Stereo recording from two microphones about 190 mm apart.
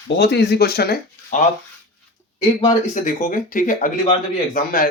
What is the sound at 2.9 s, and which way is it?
Speech, 40° left (ahead or behind).